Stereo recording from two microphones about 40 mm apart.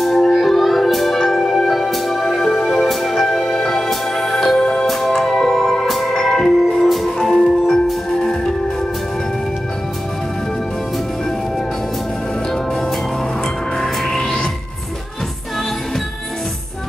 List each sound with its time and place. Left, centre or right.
0.0 s music: centre
0.4 s music: centre
3.3 s music: centre
4.6 s music: left
4.8 s music: centre
7.6 s music: centre
13.7 s music: centre